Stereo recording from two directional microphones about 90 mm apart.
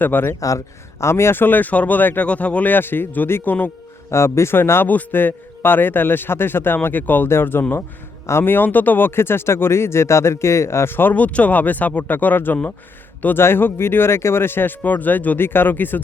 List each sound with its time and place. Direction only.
0.0 s speech: 20° left (ahead or behind)
0.3 s speech: 35° left (ahead or behind); by 16.0 s 20° left (ahead or behind)